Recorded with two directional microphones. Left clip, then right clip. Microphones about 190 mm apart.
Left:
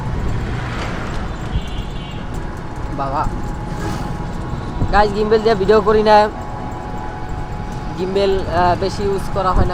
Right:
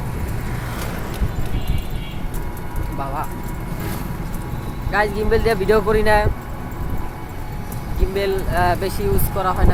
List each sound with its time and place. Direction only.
4.9 s speech: 10° left (ahead or behind)
8.1 s speech: 25° left (ahead or behind)
8.5 s speech: 10° left (ahead or behind)